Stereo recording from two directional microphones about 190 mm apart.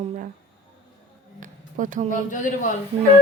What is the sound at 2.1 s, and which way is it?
Speech, 45° left (ahead or behind).